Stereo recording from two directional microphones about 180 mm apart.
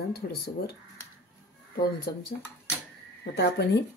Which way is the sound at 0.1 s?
60° left (ahead or behind).